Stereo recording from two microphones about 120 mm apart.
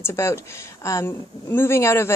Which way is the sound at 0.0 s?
20° left (ahead or behind).